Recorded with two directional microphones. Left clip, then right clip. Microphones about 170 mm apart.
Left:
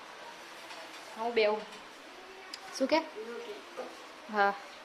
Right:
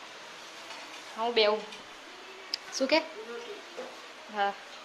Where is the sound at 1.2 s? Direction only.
5° right (ahead or behind).